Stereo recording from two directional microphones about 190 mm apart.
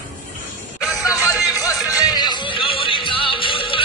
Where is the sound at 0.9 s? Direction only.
15° left (ahead or behind).